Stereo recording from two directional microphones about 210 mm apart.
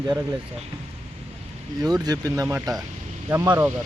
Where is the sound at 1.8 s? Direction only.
20° right (ahead or behind).